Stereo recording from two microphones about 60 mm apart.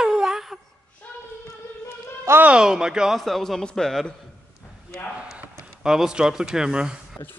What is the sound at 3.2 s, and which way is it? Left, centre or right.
Speech, centre.